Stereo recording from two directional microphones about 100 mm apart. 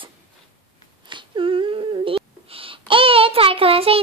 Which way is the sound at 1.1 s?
55° right (ahead or behind).